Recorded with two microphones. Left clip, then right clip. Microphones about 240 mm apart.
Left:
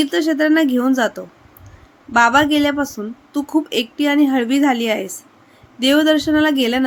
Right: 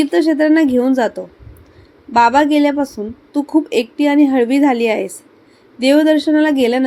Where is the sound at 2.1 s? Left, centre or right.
Centre.